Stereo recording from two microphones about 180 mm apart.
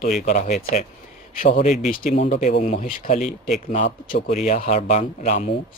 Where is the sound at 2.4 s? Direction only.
50° left (ahead or behind).